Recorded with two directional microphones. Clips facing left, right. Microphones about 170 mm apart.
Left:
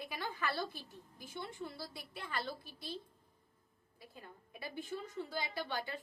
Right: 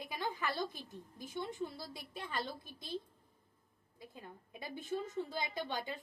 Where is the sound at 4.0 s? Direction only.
20° right (ahead or behind).